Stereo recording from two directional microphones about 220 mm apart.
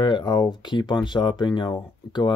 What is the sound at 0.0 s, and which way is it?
Speech, 20° left (ahead or behind).